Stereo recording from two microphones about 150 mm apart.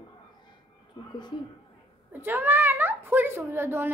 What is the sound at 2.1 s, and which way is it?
A woman's voice, 15° right (ahead or behind).